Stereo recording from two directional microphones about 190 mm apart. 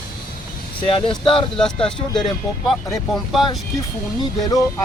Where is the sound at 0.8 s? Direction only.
30° left (ahead or behind).